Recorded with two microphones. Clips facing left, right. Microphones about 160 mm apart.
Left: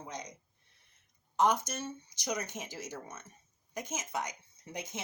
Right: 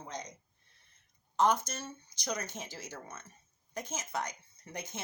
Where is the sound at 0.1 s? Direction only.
10° left (ahead or behind).